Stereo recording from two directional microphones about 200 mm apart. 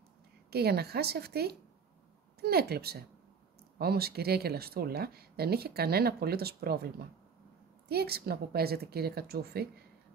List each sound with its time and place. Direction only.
0.5 s speech: 55° right (ahead or behind)